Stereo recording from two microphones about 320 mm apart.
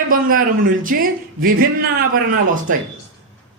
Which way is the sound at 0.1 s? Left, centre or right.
Right.